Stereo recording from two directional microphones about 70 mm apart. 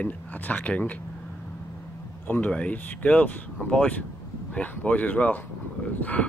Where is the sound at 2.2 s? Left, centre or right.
Left.